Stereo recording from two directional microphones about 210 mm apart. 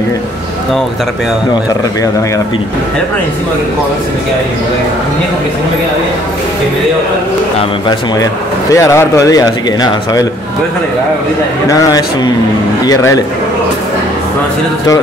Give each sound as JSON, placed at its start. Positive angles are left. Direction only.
{"t": 8.2, "sound": "speech", "side_deg": 15}
{"t": 11.7, "sound": "speech", "side_deg": 15}